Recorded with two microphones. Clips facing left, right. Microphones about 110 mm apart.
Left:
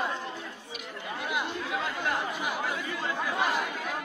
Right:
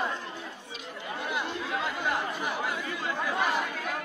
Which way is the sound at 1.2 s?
10° left (ahead or behind).